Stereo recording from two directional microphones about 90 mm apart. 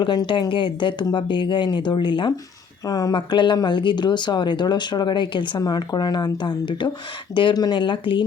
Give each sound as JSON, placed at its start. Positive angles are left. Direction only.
{"t": 0.0, "sound": "speech", "side_deg": 60}
{"t": 2.8, "sound": "speech", "side_deg": 45}
{"t": 3.2, "sound": "speech", "side_deg": 60}